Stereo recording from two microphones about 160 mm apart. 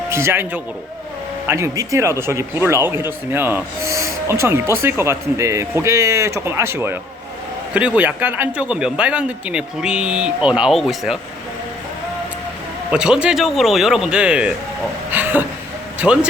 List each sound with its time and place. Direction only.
0.1 s speech: 15° right (ahead or behind)
12.9 s speech: 5° right (ahead or behind)
15.1 s a sound: 10° right (ahead or behind)
16.0 s speech: 5° right (ahead or behind)